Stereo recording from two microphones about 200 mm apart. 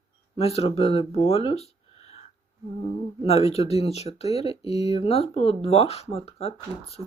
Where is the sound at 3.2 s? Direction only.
30° left (ahead or behind).